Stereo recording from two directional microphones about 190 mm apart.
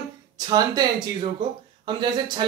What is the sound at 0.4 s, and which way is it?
Speech, 20° right (ahead or behind).